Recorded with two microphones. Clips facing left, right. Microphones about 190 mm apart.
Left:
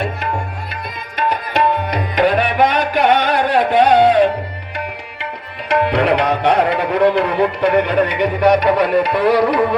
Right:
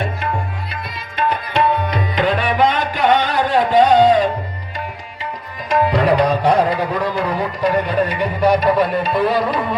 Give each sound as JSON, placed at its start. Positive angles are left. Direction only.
{"t": 1.9, "sound": "music", "side_deg": 50}
{"t": 5.6, "sound": "tabla", "side_deg": 70}